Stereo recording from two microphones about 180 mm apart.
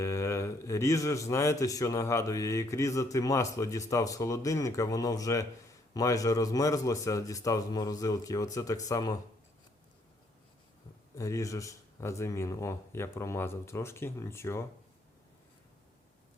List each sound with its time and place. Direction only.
0.0 s a man's voice: 15° left (ahead or behind)
11.1 s a man's voice: 15° left (ahead or behind)